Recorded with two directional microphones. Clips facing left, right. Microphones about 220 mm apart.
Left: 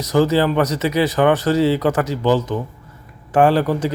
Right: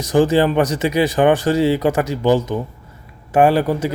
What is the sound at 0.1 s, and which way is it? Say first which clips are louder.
Speech: right 2 dB; 15° right (ahead or behind).